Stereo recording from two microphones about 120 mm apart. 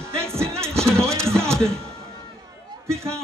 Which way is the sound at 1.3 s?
20° right (ahead or behind).